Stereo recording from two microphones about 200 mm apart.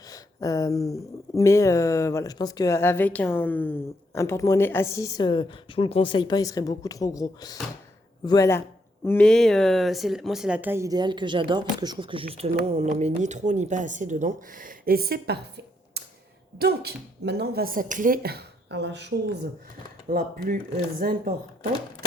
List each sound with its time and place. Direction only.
0.1 s speech: 15° left (ahead or behind); by 19.5 s 60° right (ahead or behind)
20.1 s speech: 45° right (ahead or behind)